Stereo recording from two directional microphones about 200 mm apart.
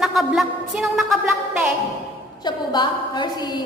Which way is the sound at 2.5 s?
20° left (ahead or behind).